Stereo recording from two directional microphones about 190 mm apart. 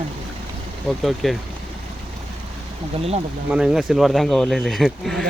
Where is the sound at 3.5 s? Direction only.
5° right (ahead or behind).